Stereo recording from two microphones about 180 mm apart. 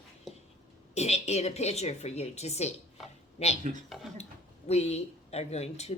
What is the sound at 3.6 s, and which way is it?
Speech, 45° right (ahead or behind).